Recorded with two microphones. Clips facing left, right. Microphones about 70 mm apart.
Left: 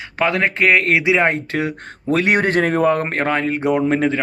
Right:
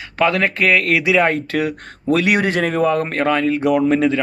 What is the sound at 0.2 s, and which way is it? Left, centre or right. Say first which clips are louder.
Speech: right 1 dB; left.